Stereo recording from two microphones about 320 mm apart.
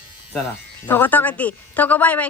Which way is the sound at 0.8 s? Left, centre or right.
Centre.